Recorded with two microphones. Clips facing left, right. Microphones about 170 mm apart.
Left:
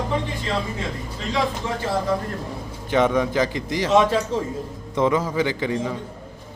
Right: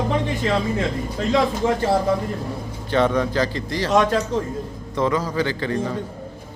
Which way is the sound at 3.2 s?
15° left (ahead or behind).